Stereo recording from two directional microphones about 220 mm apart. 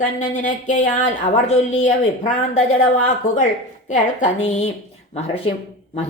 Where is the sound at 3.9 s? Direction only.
35° left (ahead or behind).